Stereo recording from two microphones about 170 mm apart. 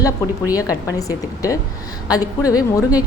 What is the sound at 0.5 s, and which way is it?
A woman's voice, 20° left (ahead or behind).